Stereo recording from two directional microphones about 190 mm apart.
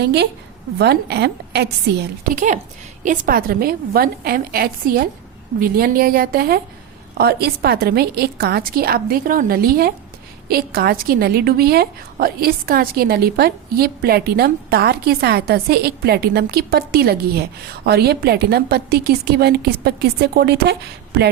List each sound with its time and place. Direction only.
0.0 s a woman's voice: 60° right (ahead or behind)
2.3 s a woman's voice: 40° right (ahead or behind); by 20.7 s 60° right (ahead or behind)